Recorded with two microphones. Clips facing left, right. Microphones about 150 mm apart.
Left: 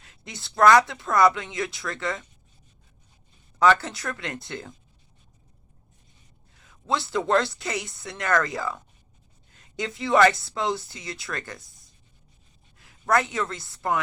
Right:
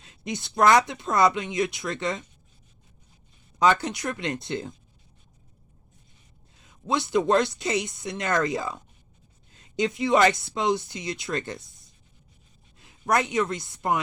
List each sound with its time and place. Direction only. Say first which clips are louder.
0.0 s speech: right 10 dB; 20° right (ahead or behind)
3.6 s speech: left 1 dB; 15° right (ahead or behind)
6.6 s speech: right 1 dB; 20° right (ahead or behind)
12.8 s a woman's voice: left 1 dB; 20° right (ahead or behind)